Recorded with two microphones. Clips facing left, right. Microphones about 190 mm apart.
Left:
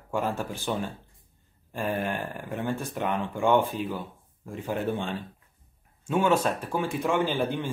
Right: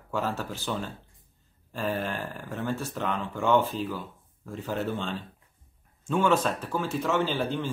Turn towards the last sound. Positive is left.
turn(degrees=10)  # may be behind; listen again after turning